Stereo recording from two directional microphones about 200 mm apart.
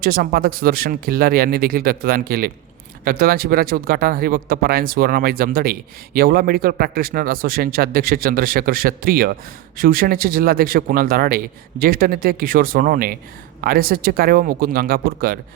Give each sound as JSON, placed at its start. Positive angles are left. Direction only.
{"t": 0.0, "sound": "a man's voice", "side_deg": -45}